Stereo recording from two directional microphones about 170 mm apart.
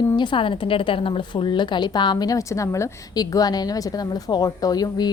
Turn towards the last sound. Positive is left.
turn(degrees=25)  # may be behind; listen again after turning